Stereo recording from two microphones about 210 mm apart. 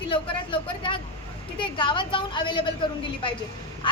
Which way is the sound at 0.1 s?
25° left (ahead or behind).